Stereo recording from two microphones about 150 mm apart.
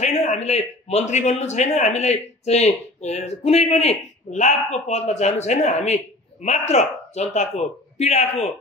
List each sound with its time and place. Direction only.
0.0 s a man's voice: 50° left (ahead or behind)